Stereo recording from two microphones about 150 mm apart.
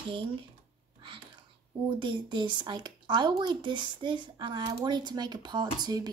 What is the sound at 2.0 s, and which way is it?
Speech, 30° right (ahead or behind).